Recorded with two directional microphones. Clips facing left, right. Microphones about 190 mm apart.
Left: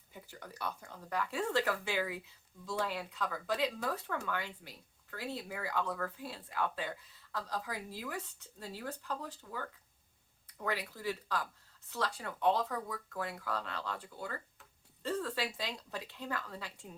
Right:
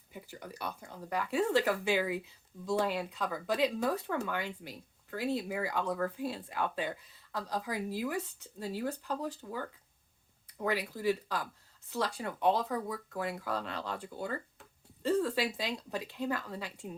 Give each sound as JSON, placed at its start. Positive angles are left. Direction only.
{"t": 0.1, "sound": "speech", "side_deg": -15}